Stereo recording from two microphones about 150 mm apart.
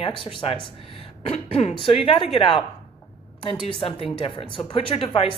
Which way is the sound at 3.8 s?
35° left (ahead or behind).